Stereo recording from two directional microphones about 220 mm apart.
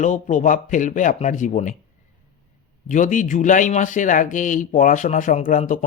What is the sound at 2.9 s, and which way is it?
Speech, 35° left (ahead or behind).